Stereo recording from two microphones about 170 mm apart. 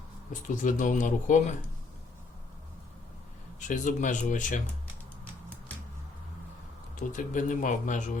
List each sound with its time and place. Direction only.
0.4 s a man's voice: 50° left (ahead or behind)
3.7 s a man's voice: 45° left (ahead or behind)
6.9 s a man's voice: 50° left (ahead or behind)